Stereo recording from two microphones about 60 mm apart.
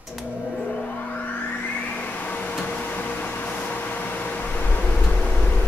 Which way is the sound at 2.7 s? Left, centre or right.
Left.